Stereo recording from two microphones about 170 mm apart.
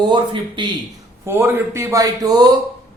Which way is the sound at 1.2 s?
15° right (ahead or behind).